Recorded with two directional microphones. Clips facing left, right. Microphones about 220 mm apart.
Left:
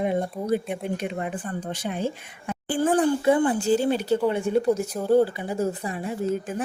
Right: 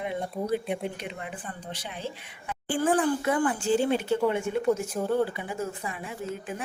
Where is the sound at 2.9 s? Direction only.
35° left (ahead or behind).